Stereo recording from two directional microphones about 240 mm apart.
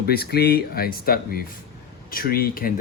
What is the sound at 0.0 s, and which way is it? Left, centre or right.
Speech, left.